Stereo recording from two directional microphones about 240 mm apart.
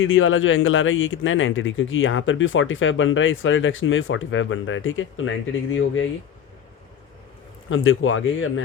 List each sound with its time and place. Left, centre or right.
0.0 s speech: left
7.7 s speech: left